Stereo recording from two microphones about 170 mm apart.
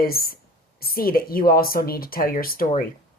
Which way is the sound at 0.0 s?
60° left (ahead or behind).